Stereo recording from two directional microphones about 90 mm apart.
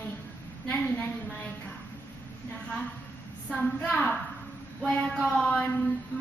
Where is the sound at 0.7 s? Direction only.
5° left (ahead or behind).